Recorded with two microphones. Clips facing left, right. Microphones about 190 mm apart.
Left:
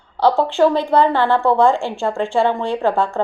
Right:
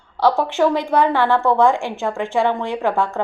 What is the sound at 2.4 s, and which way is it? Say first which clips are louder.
Speech: left 1 dB; 15° left (ahead or behind).